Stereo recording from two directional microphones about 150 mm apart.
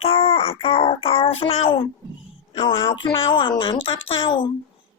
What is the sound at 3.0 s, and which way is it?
A child's voice, 35° left (ahead or behind).